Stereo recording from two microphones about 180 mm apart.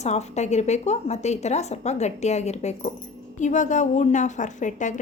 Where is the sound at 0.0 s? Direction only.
40° left (ahead or behind).